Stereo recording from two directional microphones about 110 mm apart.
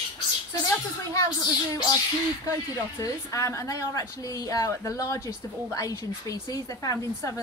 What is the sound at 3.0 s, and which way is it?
A woman's voice, 30° left (ahead or behind).